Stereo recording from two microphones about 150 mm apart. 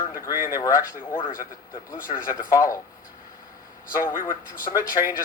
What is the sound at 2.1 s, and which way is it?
Speech, 45° left (ahead or behind).